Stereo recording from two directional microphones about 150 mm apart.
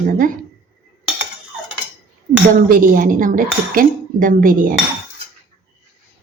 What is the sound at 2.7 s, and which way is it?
Speech, 65° right (ahead or behind).